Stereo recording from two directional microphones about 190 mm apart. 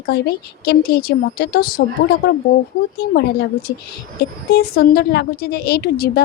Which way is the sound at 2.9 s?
55° left (ahead or behind).